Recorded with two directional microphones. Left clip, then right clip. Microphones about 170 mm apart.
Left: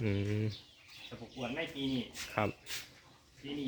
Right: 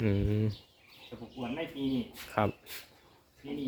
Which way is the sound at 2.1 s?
5° right (ahead or behind).